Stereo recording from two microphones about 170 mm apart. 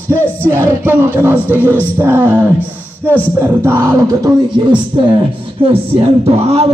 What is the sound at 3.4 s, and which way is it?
Music, 15° right (ahead or behind).